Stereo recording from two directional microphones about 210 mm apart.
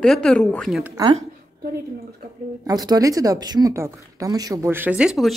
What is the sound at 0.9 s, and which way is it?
Speech, 25° right (ahead or behind).